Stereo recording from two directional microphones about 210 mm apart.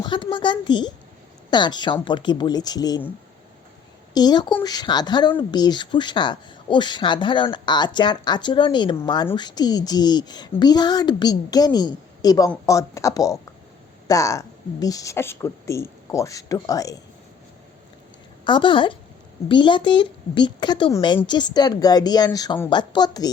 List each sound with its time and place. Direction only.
0.0 s a woman's voice: 20° left (ahead or behind)
4.1 s a woman's voice: 20° left (ahead or behind)
18.4 s a woman's voice: 20° left (ahead or behind)